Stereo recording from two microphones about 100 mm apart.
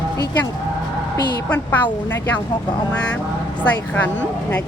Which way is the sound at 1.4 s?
15° left (ahead or behind).